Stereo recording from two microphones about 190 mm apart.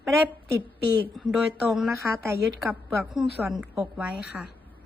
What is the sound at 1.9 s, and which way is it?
Speech, 15° right (ahead or behind).